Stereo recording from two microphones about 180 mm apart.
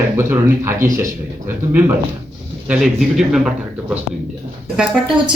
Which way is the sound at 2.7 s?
Centre (ahead or behind).